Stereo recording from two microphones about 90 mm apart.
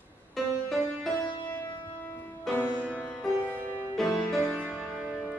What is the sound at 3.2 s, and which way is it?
Music, 15° left (ahead or behind).